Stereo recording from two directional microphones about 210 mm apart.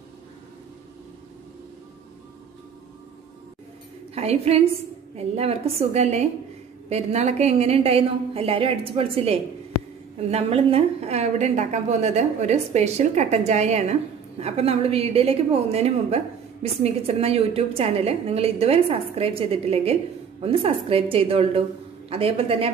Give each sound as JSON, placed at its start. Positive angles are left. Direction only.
{"t": 4.1, "sound": "a woman's voice", "side_deg": -30}